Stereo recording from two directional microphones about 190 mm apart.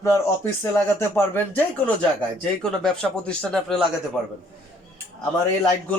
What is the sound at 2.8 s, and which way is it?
Speech, 5° left (ahead or behind).